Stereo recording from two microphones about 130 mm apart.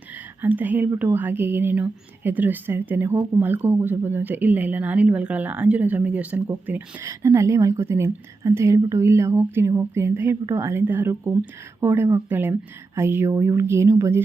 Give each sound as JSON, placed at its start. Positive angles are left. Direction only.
{"t": 0.4, "sound": "speech", "side_deg": -15}